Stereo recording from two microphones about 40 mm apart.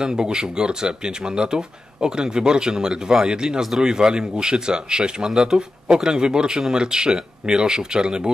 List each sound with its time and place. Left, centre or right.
0.0 s speech: centre